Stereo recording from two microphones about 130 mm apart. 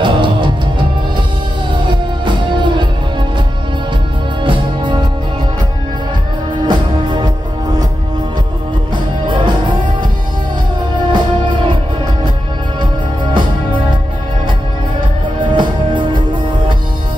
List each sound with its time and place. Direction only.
0.0 s music: 35° right (ahead or behind)
1.9 s music: 35° right (ahead or behind)
4.5 s music: 35° right (ahead or behind)
6.7 s music: 35° right (ahead or behind)
8.9 s music: 35° right (ahead or behind)
11.1 s music: 35° right (ahead or behind)
13.2 s music: 35° right (ahead or behind)
15.4 s music: 40° right (ahead or behind)